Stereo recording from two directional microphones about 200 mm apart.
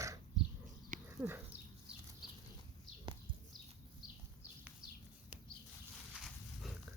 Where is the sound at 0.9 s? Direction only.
40° right (ahead or behind).